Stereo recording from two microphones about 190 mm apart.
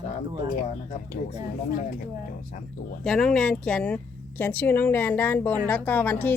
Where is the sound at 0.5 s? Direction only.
45° left (ahead or behind).